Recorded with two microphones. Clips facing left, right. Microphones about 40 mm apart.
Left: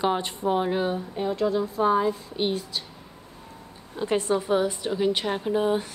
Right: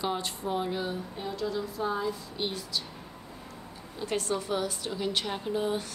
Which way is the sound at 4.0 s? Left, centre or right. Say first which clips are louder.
Left 7 dB; left.